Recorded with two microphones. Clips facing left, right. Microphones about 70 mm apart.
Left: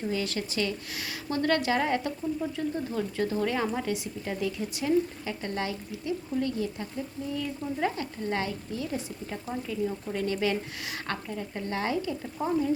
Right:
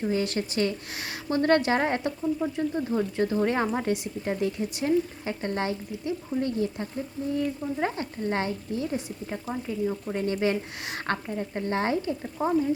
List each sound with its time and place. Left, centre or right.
0.1 s speech: right
12.4 s speech: right